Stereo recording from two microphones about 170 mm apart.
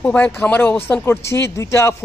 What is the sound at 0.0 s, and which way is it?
Speech, 15° left (ahead or behind).